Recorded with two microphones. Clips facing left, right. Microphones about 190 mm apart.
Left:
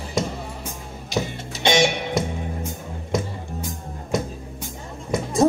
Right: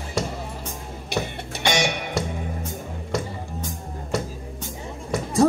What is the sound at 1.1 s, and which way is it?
Music, 60° right (ahead or behind).